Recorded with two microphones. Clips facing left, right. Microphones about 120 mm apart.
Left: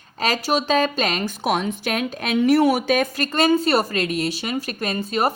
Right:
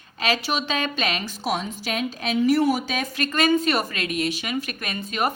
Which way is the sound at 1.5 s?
60° left (ahead or behind).